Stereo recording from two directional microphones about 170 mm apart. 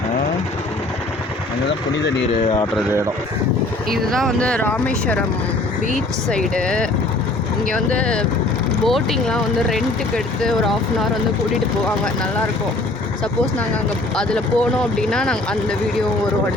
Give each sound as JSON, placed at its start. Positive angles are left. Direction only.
{"t": 4.1, "sound": "speech", "side_deg": 0}
{"t": 6.3, "sound": "speech", "side_deg": 5}
{"t": 7.9, "sound": "speech", "side_deg": 5}
{"t": 14.2, "sound": "speech", "side_deg": 5}